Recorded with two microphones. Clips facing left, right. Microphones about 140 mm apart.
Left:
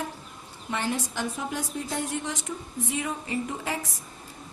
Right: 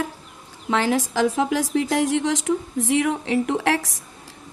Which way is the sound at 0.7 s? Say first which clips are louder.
Right 9 dB; 90° right.